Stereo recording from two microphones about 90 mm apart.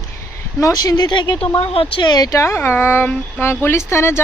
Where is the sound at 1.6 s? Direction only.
90° left.